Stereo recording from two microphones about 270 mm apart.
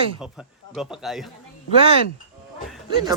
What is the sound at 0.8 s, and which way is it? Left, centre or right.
Speech, centre.